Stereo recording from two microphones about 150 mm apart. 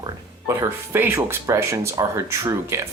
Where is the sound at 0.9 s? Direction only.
15° right (ahead or behind).